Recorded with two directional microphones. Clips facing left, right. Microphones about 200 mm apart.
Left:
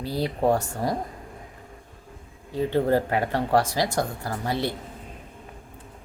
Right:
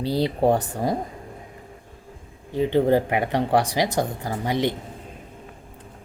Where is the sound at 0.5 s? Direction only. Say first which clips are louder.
Right 2 dB; 15° right (ahead or behind).